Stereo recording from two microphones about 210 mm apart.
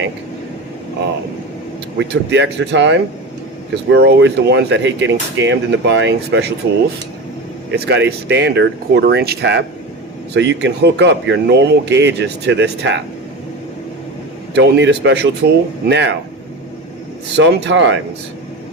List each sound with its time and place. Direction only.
2.0 s speech: 55° right (ahead or behind)
7.7 s speech: 50° right (ahead or behind)
14.5 s speech: 55° right (ahead or behind)
17.3 s speech: 55° right (ahead or behind)